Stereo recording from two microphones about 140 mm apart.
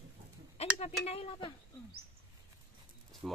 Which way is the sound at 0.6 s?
45° left (ahead or behind).